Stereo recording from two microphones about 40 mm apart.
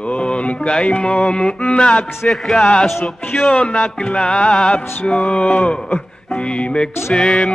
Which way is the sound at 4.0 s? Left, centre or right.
Left.